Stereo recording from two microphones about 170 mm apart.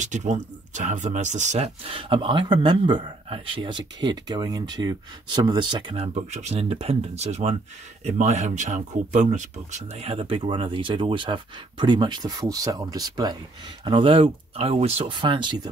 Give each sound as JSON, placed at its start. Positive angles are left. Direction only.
{"t": 0.0, "sound": "speech", "side_deg": -45}
{"t": 6.1, "sound": "speech", "side_deg": -40}